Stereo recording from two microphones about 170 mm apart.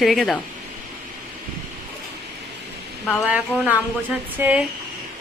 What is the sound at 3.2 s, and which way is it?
Speech, 5° right (ahead or behind).